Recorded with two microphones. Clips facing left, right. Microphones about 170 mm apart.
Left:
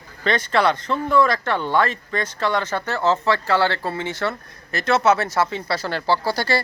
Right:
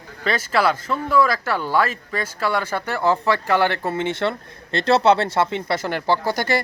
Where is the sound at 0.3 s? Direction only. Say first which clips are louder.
Left 1 dB; 5° right (ahead or behind).